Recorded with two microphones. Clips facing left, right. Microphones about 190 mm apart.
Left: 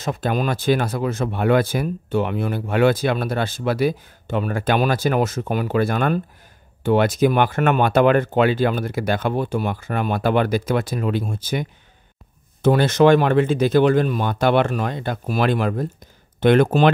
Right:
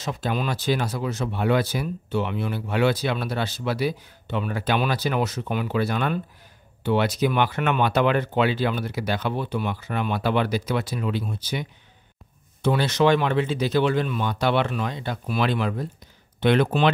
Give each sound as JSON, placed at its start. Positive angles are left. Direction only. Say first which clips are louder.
{"t": 0.0, "sound": "speech", "louder": "left 4 dB", "side_deg": 50}
{"t": 12.6, "sound": "speech", "louder": "left 6 dB", "side_deg": 50}